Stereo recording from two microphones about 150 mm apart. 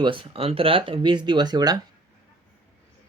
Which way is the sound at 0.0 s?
35° right (ahead or behind).